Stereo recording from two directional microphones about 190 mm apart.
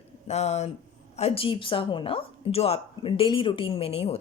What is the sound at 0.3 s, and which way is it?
Speech, 35° left (ahead or behind).